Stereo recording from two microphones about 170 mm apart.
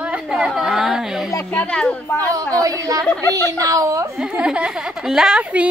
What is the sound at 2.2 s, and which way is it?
A woman's voice, 20° right (ahead or behind).